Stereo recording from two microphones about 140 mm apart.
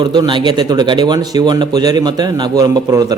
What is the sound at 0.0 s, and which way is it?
Speech, 30° right (ahead or behind).